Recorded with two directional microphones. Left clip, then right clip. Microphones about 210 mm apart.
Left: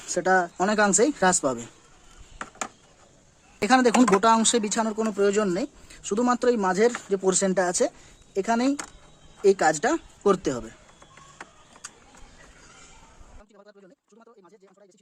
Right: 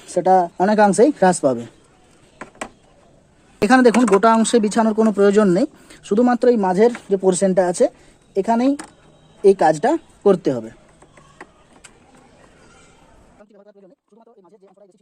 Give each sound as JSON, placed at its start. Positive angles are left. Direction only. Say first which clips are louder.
{"t": 0.0, "sound": "speech", "louder": "right 7 dB", "side_deg": -10}
{"t": 3.6, "sound": "speech", "louder": "right 6 dB", "side_deg": -20}